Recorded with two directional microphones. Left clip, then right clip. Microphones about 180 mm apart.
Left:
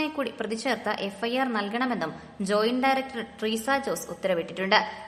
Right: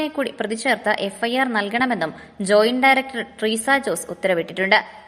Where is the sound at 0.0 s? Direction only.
20° right (ahead or behind).